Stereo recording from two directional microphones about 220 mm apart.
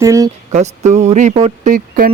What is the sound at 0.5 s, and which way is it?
Speech, 30° right (ahead or behind).